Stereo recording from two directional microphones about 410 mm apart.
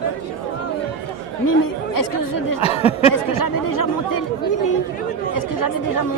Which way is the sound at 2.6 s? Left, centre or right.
Centre.